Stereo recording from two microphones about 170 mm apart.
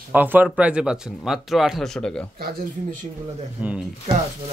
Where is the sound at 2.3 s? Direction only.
65° right (ahead or behind).